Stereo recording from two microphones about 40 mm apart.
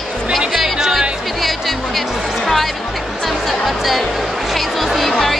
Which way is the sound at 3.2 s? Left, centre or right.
Centre.